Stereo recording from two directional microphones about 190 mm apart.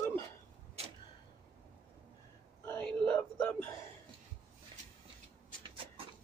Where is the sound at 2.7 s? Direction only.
5° left (ahead or behind).